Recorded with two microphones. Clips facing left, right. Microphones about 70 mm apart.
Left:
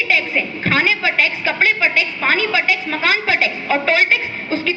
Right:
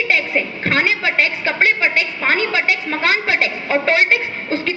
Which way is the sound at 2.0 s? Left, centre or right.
Right.